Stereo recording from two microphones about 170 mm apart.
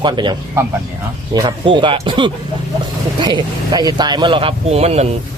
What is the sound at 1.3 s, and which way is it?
A man's voice, 30° right (ahead or behind).